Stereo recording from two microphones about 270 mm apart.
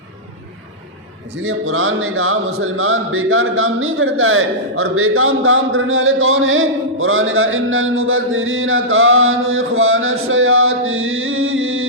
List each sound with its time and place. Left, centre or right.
1.5 s speech: right